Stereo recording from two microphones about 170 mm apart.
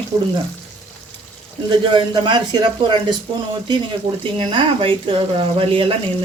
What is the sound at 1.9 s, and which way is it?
Speech, 30° right (ahead or behind).